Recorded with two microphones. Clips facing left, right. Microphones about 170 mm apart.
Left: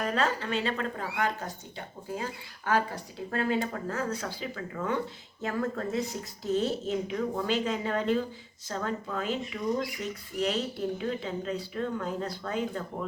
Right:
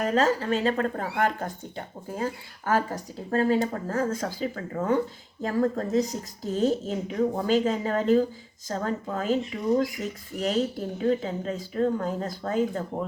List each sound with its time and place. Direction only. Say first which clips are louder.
0.0 s speech: right 5 dB; 40° right (ahead or behind)